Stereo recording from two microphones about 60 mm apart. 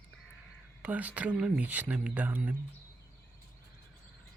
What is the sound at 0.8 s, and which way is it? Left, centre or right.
Speech, right.